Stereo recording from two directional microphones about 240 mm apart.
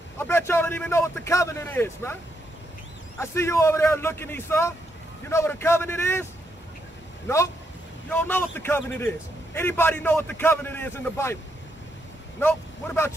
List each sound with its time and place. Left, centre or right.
0.2 s a man's voice: centre
3.2 s a man's voice: centre
7.2 s a man's voice: centre
12.4 s speech: centre